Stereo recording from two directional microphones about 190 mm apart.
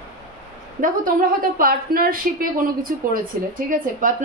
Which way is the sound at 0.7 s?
45° right (ahead or behind).